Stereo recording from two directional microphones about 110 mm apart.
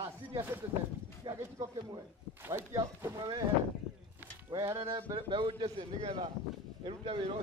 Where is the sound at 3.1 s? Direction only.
40° right (ahead or behind).